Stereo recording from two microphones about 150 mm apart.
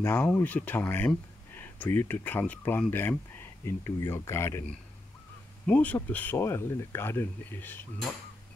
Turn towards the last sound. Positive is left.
turn(degrees=15)  # may be behind; listen again after turning